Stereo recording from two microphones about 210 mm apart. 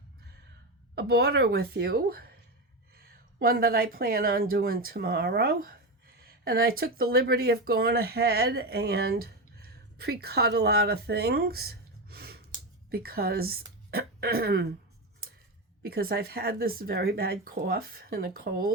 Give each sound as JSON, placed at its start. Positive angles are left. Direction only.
{"t": 0.9, "sound": "speech", "side_deg": -50}
{"t": 15.8, "sound": "speech", "side_deg": -45}